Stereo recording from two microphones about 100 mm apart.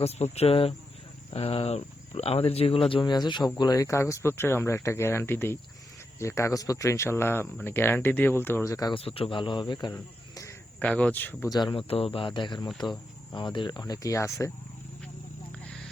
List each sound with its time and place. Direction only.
0.0 s speech: 90° left; by 3.5 s 45° left (ahead or behind)
3.6 s speech: 35° left (ahead or behind)
8.9 s speech: 70° left (ahead or behind); by 9.9 s 50° left (ahead or behind)
9.9 s cricket: 30° left (ahead or behind)
10.8 s speech: 15° left (ahead or behind)
11.4 s speech: 40° left (ahead or behind)
11.7 s speech: 65° left (ahead or behind); by 14.5 s 30° left (ahead or behind)